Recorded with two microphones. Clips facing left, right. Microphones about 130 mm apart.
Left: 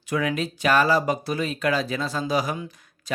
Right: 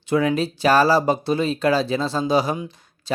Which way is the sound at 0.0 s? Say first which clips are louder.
Right 5 dB; 30° right (ahead or behind).